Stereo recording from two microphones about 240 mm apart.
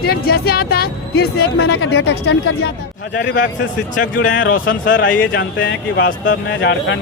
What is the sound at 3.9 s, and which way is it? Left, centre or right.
Speech, left.